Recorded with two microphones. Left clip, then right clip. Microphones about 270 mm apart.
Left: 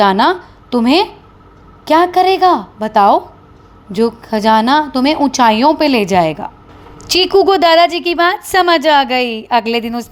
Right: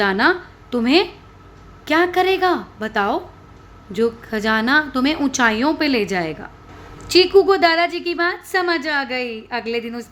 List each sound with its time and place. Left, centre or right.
0.0 s a woman's voice: left